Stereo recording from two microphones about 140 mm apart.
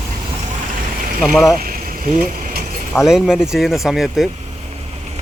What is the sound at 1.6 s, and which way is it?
Vehicle, 85° right.